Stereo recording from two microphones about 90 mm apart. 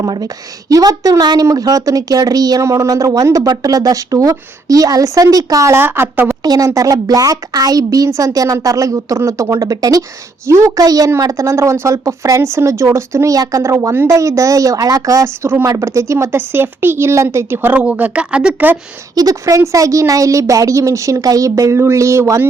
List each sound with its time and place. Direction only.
0.0 s speech: 45° right (ahead or behind); by 6.3 s 25° right (ahead or behind)
6.4 s speech: 45° right (ahead or behind)
10.4 s a woman's voice: 30° right (ahead or behind); by 18.8 s 15° right (ahead or behind)
19.1 s speech: 45° right (ahead or behind)